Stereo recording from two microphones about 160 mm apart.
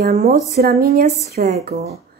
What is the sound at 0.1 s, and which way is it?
Speech, 45° right (ahead or behind).